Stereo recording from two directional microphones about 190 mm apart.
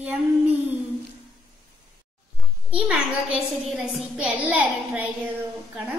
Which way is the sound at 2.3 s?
5° right (ahead or behind).